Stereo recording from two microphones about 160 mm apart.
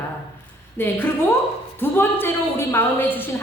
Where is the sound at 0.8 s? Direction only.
15° left (ahead or behind).